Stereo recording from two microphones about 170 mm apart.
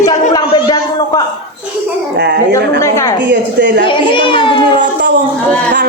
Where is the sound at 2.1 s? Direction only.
75° right (ahead or behind).